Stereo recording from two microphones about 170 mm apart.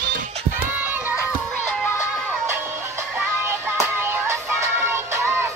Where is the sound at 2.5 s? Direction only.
15° right (ahead or behind).